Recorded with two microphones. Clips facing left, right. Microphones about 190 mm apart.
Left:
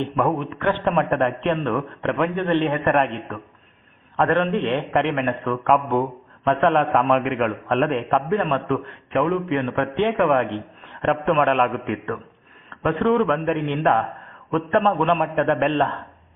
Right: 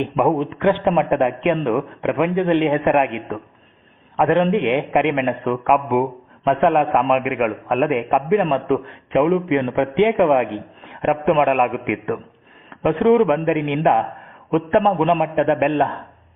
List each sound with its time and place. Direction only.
0.0 s a man's voice: 15° right (ahead or behind)